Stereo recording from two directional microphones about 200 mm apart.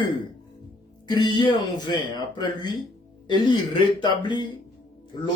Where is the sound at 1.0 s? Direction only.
20° left (ahead or behind).